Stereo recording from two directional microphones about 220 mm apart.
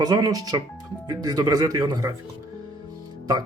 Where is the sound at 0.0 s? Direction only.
15° right (ahead or behind).